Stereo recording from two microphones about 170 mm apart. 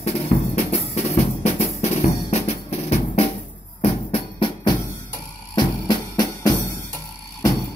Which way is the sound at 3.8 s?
35° left (ahead or behind).